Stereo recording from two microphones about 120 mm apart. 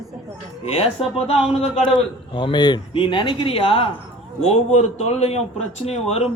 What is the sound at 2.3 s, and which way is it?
A man's voice, 40° left (ahead or behind).